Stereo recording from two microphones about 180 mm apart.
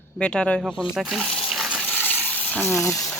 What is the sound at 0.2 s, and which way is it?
Speech, 5° left (ahead or behind).